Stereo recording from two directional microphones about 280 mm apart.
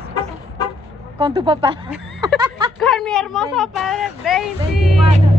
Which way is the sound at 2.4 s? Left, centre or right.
Centre.